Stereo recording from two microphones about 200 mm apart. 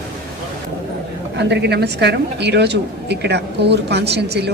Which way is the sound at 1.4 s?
60° right (ahead or behind).